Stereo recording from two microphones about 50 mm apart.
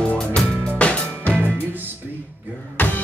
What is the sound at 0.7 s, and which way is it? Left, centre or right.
Music, left.